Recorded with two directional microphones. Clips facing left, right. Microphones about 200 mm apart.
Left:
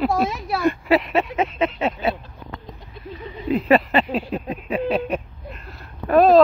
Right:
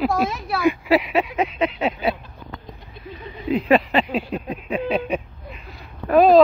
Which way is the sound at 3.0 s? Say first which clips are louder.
Left 1 dB; 5° left (ahead or behind).